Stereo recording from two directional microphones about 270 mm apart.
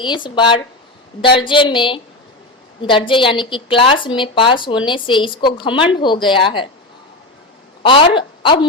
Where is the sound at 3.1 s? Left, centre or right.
Centre.